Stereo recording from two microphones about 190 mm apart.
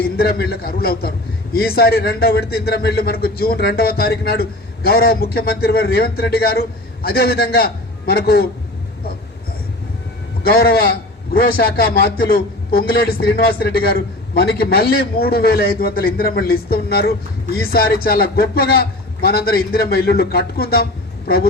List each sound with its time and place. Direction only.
0.0 s a man's voice: 55° left (ahead or behind)
10.4 s a man's voice: 55° left (ahead or behind)